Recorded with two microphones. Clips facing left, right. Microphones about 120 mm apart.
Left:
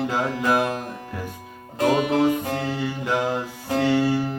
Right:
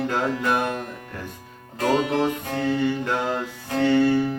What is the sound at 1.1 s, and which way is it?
Music, 10° left (ahead or behind).